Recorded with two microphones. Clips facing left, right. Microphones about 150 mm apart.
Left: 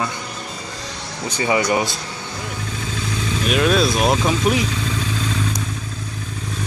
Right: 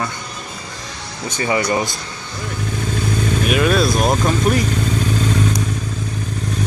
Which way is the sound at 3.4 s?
Centre (ahead or behind).